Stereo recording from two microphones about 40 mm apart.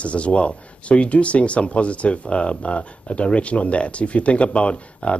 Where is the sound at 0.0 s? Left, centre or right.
Left.